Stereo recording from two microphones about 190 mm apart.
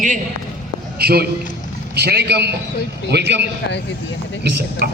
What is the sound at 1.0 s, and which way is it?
A man's voice, 55° right (ahead or behind).